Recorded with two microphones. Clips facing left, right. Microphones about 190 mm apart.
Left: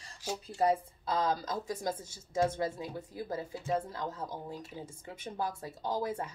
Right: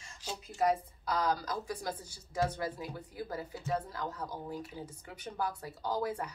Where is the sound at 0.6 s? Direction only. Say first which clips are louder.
Left 1 dB; 25° left (ahead or behind).